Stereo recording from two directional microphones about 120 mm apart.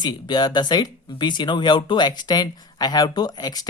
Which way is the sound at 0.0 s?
35° left (ahead or behind).